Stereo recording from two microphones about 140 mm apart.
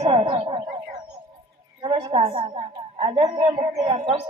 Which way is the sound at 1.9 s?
40° right (ahead or behind).